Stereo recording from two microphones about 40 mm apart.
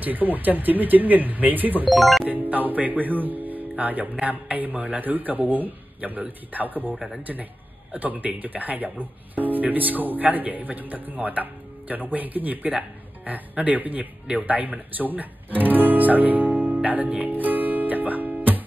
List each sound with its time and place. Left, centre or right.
0.0 s a man's voice: right
1.9 s speech: centre
2.2 s a man's voice: right
17.2 s music: right